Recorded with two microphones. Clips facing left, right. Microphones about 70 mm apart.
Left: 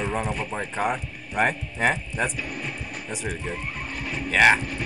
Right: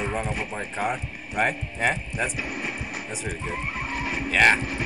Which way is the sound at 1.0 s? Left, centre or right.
Right.